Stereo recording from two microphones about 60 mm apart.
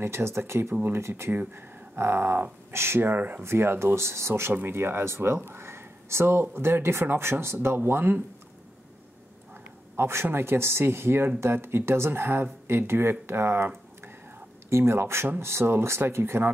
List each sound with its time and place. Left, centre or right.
0.0 s speech: right
1.3 s speech: right
9.9 s a man's voice: right